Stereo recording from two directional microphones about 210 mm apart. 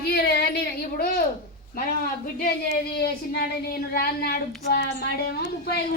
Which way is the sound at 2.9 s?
50° left (ahead or behind).